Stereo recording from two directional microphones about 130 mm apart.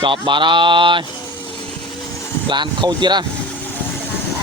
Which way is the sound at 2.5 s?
35° right (ahead or behind).